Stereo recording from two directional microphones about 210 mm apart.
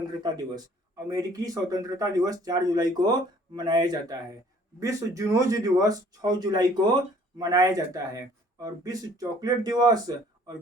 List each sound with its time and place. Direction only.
0.2 s speech: 20° right (ahead or behind)